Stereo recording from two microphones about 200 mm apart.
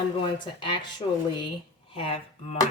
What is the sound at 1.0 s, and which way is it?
Speech, 30° left (ahead or behind).